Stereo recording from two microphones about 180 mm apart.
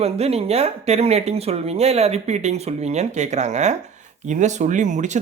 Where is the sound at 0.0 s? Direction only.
35° right (ahead or behind).